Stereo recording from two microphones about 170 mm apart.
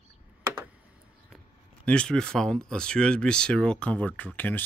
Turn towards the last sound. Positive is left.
turn(degrees=10)  # may be behind; listen again after turning